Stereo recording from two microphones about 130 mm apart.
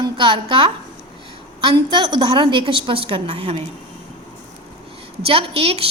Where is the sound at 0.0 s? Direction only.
40° right (ahead or behind).